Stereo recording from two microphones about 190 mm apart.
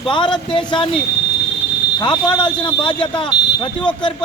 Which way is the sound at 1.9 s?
25° left (ahead or behind).